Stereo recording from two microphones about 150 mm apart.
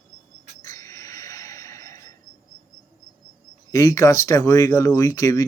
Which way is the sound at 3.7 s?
20° left (ahead or behind).